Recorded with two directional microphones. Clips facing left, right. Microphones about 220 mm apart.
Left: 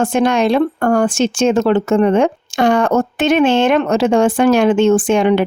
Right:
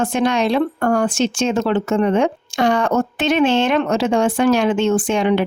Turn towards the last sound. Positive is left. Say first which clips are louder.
# left 4 dB
turn(degrees=55)  # may be behind; listen again after turning